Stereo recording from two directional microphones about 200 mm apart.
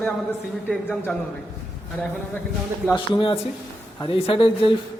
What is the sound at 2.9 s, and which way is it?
Speech, 25° left (ahead or behind).